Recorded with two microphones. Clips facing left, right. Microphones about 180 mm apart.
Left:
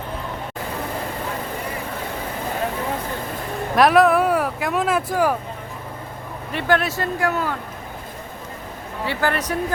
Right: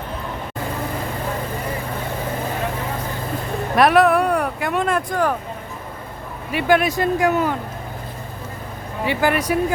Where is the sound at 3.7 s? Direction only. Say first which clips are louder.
Even; centre (ahead or behind).